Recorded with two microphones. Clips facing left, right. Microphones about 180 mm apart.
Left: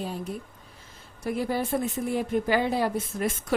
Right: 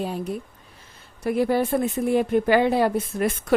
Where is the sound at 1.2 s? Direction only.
65° right (ahead or behind).